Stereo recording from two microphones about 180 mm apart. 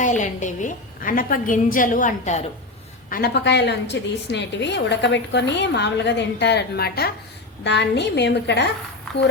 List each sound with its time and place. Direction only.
0.0 s a woman's voice: 40° left (ahead or behind)
3.1 s a woman's voice: 55° left (ahead or behind)
7.6 s a woman's voice: 70° left (ahead or behind)